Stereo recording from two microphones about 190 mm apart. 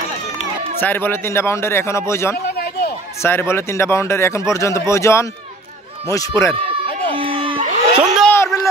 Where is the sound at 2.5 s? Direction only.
55° left (ahead or behind).